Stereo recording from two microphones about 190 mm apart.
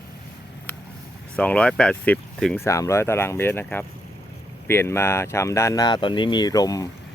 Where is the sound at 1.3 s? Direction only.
5° left (ahead or behind).